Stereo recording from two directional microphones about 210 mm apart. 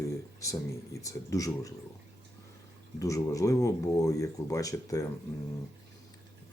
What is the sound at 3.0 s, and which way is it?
Speech, 15° left (ahead or behind).